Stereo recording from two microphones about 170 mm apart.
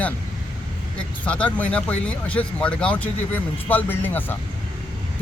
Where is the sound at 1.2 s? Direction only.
10° left (ahead or behind).